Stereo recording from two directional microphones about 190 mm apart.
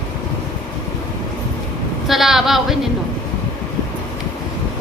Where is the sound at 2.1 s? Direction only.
Centre (ahead or behind).